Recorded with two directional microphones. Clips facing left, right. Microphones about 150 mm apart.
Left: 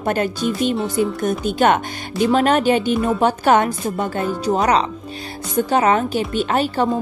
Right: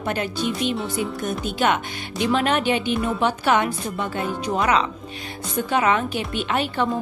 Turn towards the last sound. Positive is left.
turn(degrees=40)  # may be behind; listen again after turning